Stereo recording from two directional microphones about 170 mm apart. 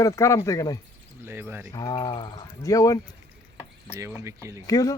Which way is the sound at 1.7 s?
25° left (ahead or behind).